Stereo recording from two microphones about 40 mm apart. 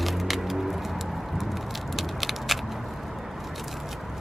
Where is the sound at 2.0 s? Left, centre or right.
Centre.